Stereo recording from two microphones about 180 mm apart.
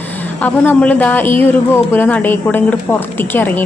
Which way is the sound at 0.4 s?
10° left (ahead or behind).